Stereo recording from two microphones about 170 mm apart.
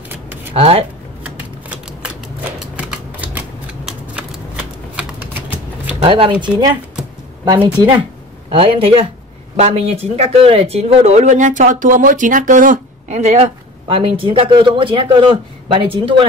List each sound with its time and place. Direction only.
0.5 s speech: 35° right (ahead or behind)
1.2 s typewriter: 10° right (ahead or behind)
6.0 s speech: 30° right (ahead or behind)
7.6 s speech: 25° right (ahead or behind)